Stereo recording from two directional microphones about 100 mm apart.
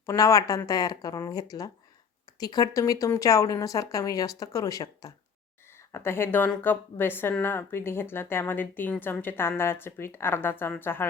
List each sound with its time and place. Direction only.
0.0 s a woman's voice: 30° left (ahead or behind)
5.9 s speech: 25° left (ahead or behind)